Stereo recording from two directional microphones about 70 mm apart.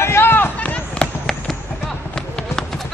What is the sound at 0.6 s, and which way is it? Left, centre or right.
Chop, left.